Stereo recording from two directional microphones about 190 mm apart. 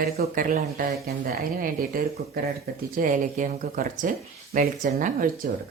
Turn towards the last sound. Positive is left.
turn(degrees=-45)  # may be behind; listen again after turning